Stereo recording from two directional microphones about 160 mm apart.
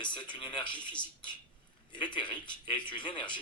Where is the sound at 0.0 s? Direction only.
30° left (ahead or behind).